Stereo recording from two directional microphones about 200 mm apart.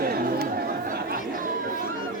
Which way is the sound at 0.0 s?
45° right (ahead or behind).